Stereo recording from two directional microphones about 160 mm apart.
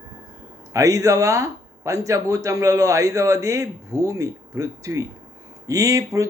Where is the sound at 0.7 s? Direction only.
20° right (ahead or behind).